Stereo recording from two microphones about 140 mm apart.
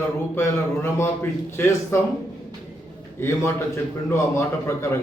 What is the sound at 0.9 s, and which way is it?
A man's voice, 15° left (ahead or behind).